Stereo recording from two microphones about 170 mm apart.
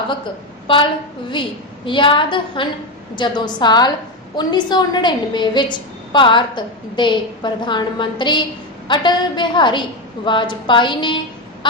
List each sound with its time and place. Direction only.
0.7 s a woman's voice: 30° left (ahead or behind)